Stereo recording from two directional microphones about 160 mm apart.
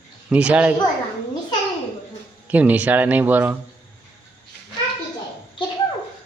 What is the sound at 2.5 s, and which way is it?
Speech, 10° right (ahead or behind).